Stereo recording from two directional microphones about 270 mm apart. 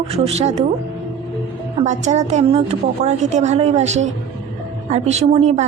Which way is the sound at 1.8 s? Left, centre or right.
Right.